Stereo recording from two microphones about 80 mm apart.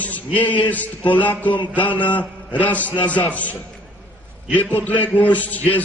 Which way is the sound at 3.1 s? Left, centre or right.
Centre.